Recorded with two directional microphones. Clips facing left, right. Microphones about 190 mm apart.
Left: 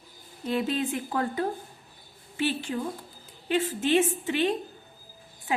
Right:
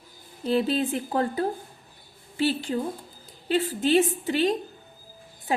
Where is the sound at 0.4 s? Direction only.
35° right (ahead or behind).